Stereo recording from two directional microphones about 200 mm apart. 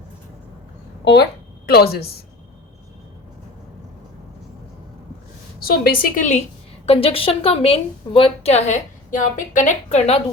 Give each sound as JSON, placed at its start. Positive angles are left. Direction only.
{"t": 1.0, "sound": "a woman's voice", "side_deg": 55}
{"t": 5.6, "sound": "a woman's voice", "side_deg": 50}
{"t": 6.8, "sound": "a woman's voice", "side_deg": 30}